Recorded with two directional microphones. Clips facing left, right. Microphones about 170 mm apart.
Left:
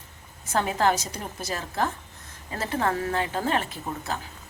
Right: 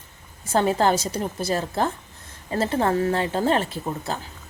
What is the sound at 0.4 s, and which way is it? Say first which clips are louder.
Speech: right 4 dB; 30° right (ahead or behind).